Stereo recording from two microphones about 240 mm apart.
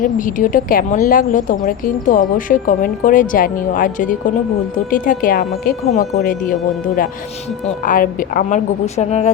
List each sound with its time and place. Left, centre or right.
0.0 s a woman's voice: left